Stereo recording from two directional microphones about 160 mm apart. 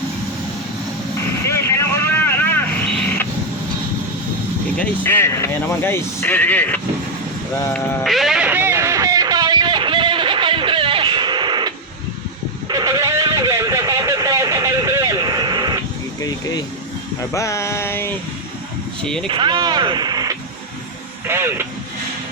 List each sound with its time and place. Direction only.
1.5 s vehicle: 15° left (ahead or behind)
4.8 s speech: 15° left (ahead or behind)
7.7 s music: 5° left (ahead or behind); by 11.7 s 30° right (ahead or behind)
12.6 s a sound: 20° right (ahead or behind)
17.3 s a sound: 20° left (ahead or behind)
19.0 s speech: 5° left (ahead or behind)
19.3 s speech: 30° right (ahead or behind)